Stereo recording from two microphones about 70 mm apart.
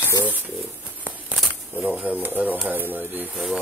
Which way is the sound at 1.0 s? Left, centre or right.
Right.